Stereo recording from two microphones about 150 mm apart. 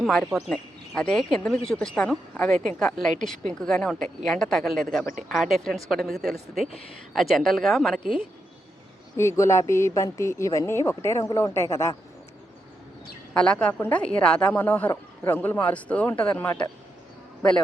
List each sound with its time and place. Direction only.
0.3 s speech: centre (ahead or behind)
9.1 s speech: 20° left (ahead or behind)
13.3 s speech: 5° left (ahead or behind)